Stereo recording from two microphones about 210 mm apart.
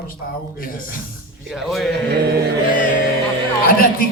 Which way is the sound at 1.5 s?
Centre (ahead or behind).